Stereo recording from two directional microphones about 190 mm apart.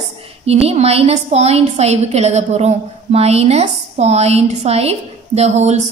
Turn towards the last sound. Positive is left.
turn(degrees=-35)  # may be behind; listen again after turning